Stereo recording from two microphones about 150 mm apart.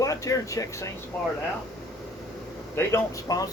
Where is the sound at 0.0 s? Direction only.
20° left (ahead or behind).